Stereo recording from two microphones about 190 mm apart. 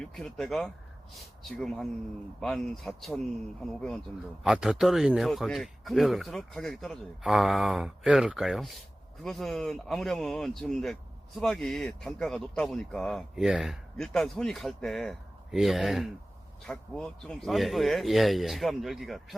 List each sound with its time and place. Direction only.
0.0 s speech: centre (ahead or behind)